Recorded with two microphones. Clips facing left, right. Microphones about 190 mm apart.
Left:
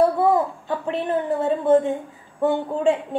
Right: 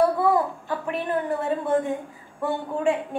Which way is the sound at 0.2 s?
25° left (ahead or behind).